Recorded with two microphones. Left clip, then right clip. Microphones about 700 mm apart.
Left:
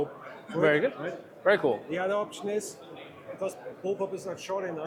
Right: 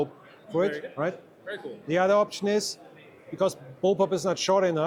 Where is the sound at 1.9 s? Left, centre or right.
Right.